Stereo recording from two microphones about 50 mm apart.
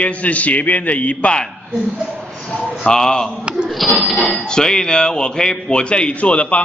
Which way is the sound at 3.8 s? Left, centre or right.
Centre.